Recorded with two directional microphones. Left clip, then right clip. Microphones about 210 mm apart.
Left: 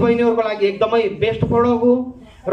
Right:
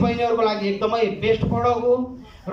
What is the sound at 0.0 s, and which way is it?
Speech, 50° left (ahead or behind).